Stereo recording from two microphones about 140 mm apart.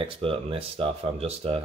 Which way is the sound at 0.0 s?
40° right (ahead or behind).